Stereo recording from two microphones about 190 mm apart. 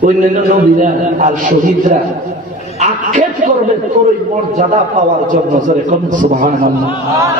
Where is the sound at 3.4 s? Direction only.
40° right (ahead or behind).